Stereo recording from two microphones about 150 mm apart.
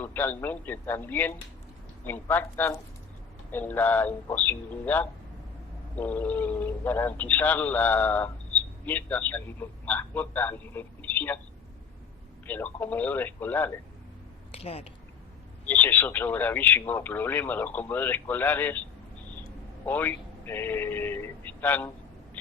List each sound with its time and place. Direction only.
0.0 s speech: 10° left (ahead or behind)
12.5 s speech: 10° left (ahead or behind)
14.5 s speech: 40° left (ahead or behind)
15.6 s speech: 10° left (ahead or behind)